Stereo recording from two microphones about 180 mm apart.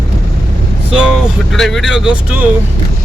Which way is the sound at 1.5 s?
Centre (ahead or behind).